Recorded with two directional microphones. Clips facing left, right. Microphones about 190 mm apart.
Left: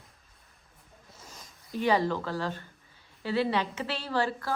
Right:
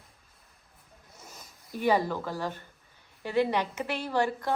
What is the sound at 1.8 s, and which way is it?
Speech, 10° right (ahead or behind).